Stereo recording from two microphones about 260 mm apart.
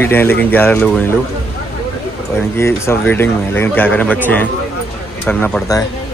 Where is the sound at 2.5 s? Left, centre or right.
Centre.